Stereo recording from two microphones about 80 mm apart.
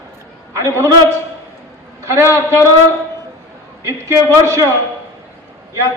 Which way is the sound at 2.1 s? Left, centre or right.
Right.